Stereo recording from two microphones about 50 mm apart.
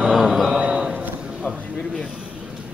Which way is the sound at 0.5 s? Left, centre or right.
Right.